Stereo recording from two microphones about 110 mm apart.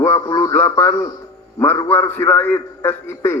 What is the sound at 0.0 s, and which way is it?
Music, 30° left (ahead or behind).